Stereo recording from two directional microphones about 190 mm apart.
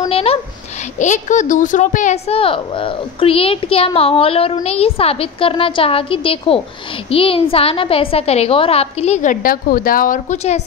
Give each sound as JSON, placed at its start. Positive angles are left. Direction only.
{"t": 0.1, "sound": "a child's voice", "side_deg": 30}